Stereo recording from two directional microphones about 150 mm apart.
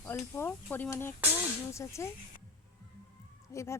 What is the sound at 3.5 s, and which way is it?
Speech, 20° left (ahead or behind).